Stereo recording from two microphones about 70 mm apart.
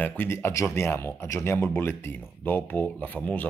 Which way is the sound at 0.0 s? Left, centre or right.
Left.